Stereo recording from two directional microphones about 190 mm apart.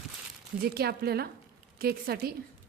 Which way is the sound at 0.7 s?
55° right (ahead or behind).